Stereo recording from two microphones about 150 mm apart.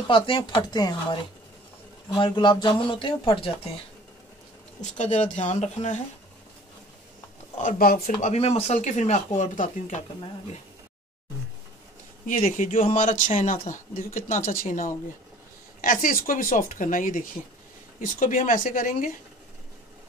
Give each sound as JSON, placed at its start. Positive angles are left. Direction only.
{"t": 0.1, "sound": "speech", "side_deg": 35}
{"t": 4.9, "sound": "speech", "side_deg": 50}
{"t": 7.8, "sound": "speech", "side_deg": 75}
{"t": 8.3, "sound": "speech", "side_deg": 45}
{"t": 12.3, "sound": "speech", "side_deg": 60}